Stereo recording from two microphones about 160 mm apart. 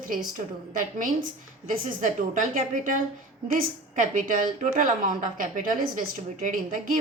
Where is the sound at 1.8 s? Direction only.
55° right (ahead or behind).